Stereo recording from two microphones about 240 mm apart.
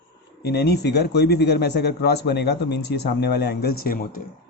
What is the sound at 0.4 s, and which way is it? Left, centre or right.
Speech, left.